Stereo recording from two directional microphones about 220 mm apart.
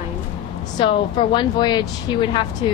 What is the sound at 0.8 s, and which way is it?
Speech, 20° left (ahead or behind).